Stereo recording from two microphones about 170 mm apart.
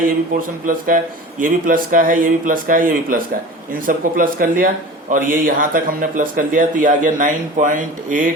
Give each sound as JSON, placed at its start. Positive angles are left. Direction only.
{"t": 0.6, "sound": "speech", "side_deg": -55}